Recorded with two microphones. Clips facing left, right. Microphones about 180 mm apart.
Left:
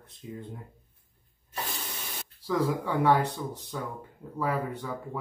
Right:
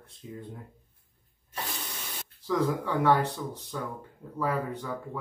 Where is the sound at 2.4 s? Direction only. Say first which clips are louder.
Even; 15° left (ahead or behind).